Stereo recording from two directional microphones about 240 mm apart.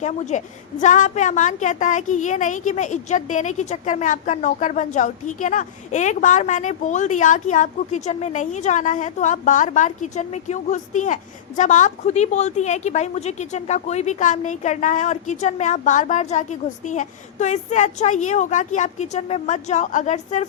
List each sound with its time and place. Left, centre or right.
0.0 s a woman's voice: left